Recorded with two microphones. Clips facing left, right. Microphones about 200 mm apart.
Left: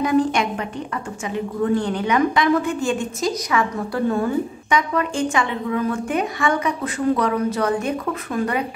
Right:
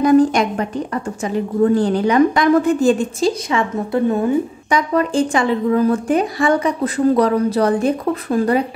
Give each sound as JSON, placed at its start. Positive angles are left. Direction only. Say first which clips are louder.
{"t": 0.0, "sound": "a woman's voice", "louder": "right 6 dB", "side_deg": -40}
{"t": 4.6, "sound": "speech", "louder": "right 3 dB", "side_deg": -35}